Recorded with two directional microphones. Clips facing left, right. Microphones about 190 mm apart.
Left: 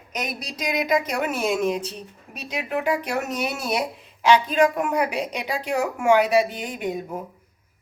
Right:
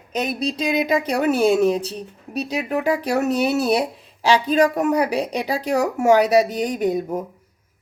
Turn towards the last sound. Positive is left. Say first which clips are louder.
# right 8 dB
turn(degrees=-35)  # may be behind; listen again after turning